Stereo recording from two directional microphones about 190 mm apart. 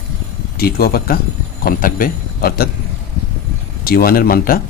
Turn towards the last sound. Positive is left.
turn(degrees=50)  # may be behind; listen again after turning